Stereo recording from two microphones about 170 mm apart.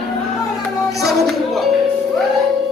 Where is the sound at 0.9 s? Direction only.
Centre (ahead or behind).